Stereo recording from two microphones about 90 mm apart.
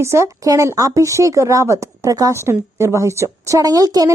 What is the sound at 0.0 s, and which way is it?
Speech, 30° right (ahead or behind).